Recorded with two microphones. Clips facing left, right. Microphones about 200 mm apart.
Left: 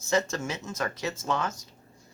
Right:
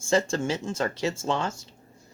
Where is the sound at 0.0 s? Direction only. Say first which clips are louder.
Right 3 dB; 30° right (ahead or behind).